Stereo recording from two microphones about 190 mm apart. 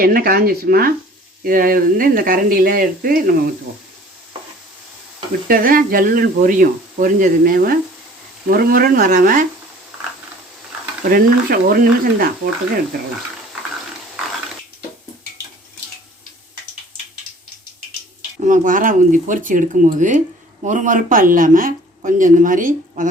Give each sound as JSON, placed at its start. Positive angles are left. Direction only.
{"t": 0.0, "sound": "speech", "side_deg": -50}
{"t": 5.5, "sound": "speech", "side_deg": -50}
{"t": 11.1, "sound": "speech", "side_deg": -50}
{"t": 18.3, "sound": "speech", "side_deg": -40}